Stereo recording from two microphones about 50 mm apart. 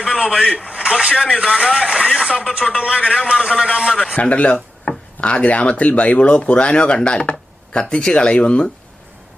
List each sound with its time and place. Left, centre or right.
0.6 s speech: centre
4.1 s speech: left